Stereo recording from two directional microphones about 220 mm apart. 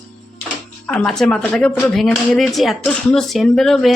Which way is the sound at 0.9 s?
5° left (ahead or behind).